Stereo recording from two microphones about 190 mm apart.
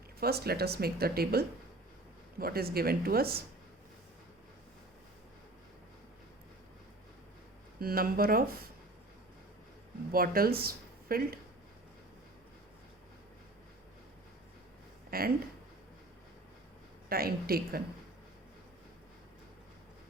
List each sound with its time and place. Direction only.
0.2 s speech: 55° right (ahead or behind)
7.8 s speech: 50° right (ahead or behind)
10.1 s speech: 50° right (ahead or behind)
15.1 s speech: 50° right (ahead or behind)
17.1 s speech: 50° right (ahead or behind)